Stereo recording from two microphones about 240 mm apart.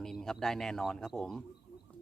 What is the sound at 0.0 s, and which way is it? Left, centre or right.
Speech, centre.